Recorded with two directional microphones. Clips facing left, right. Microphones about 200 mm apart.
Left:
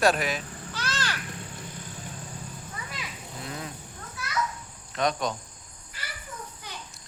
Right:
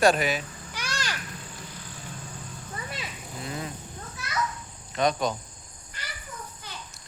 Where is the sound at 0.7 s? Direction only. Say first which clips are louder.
Left 1 dB; 15° right (ahead or behind).